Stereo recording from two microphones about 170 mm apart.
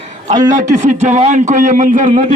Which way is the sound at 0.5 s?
45° right (ahead or behind).